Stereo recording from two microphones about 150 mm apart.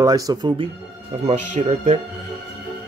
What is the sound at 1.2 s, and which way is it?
Speech, 50° right (ahead or behind).